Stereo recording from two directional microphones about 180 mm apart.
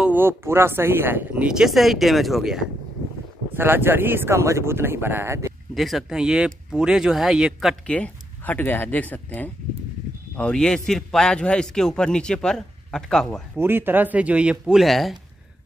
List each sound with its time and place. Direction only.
0.0 s speech: 10° right (ahead or behind)
3.5 s speech: 10° right (ahead or behind)
5.8 s speech: centre (ahead or behind)
13.6 s speech: 10° right (ahead or behind)